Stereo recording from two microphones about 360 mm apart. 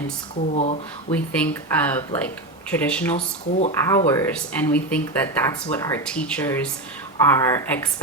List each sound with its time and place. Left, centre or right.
0.5 s speech: centre
1.1 s speech: centre